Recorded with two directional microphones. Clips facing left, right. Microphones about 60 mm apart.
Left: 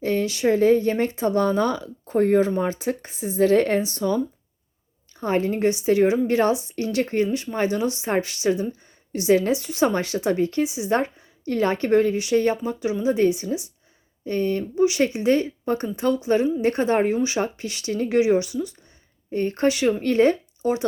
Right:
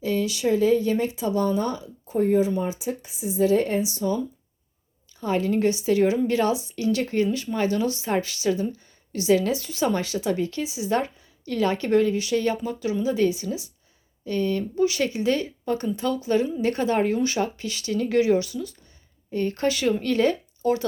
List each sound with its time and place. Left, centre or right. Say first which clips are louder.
0.0 s speech: left 2 dB; left
5.1 s a woman's voice: left 1 dB; left